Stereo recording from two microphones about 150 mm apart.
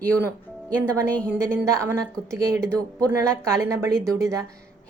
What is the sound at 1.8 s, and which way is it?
Speech, 20° right (ahead or behind).